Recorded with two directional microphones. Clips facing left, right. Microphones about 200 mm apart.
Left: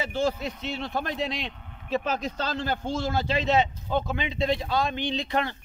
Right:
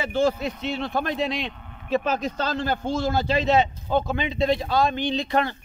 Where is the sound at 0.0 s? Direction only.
60° right (ahead or behind).